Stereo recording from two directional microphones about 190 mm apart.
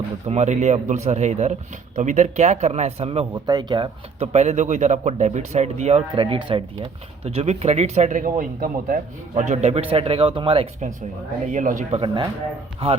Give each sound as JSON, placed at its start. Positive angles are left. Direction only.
{"t": 0.3, "sound": "speech", "side_deg": -35}